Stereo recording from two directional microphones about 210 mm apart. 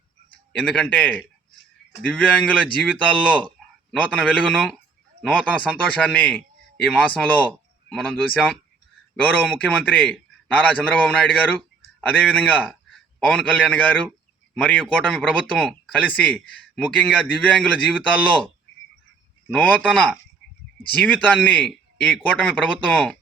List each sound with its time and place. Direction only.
0.5 s a man's voice: 5° left (ahead or behind)
19.5 s a man's voice: 5° left (ahead or behind)